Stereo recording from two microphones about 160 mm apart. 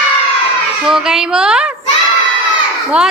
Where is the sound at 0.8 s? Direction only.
5° right (ahead or behind).